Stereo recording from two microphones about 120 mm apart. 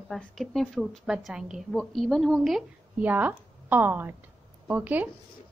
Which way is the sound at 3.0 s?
15° right (ahead or behind).